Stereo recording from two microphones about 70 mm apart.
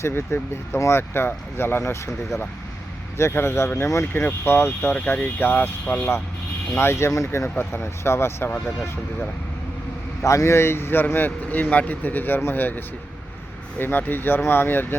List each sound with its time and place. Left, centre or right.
0.0 s speech: left
3.2 s speech: left
4.9 s speech: centre
6.7 s speech: left
10.2 s speech: left